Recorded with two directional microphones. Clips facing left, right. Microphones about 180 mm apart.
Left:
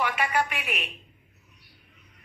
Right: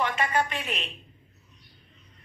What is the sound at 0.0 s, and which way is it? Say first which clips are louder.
A woman's voice: even; 10° left (ahead or behind).